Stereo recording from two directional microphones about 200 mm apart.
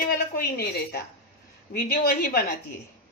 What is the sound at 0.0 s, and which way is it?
A woman's voice, 50° left (ahead or behind).